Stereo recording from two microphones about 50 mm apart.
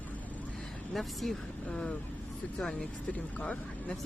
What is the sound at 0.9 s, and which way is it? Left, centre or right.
Speech, centre.